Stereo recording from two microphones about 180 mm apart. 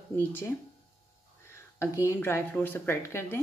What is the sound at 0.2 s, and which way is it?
Speech, 10° left (ahead or behind).